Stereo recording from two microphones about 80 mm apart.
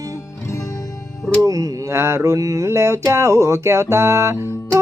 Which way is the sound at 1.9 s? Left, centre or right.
Right.